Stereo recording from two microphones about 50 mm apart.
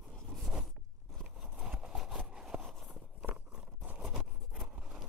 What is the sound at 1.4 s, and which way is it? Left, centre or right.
Clip-clop, centre.